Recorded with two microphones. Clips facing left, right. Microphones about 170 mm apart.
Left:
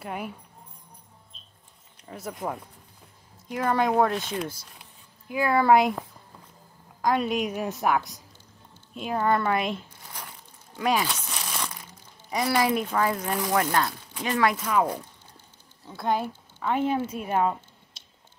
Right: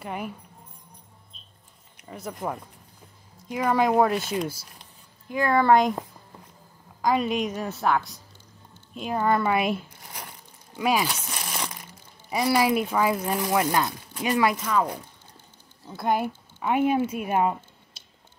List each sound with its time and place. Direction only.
0.0 s speech: centre (ahead or behind)
2.0 s speech: centre (ahead or behind)
5.3 s speech: 5° left (ahead or behind)
7.0 s speech: centre (ahead or behind)
7.6 s a woman's voice: 15° left (ahead or behind)
8.9 s speech: centre (ahead or behind)
11.1 s crumpling: 10° right (ahead or behind)
12.3 s speech: 10° right (ahead or behind)
14.6 s a woman's voice: 10° left (ahead or behind)
16.0 s speech: 10° right (ahead or behind)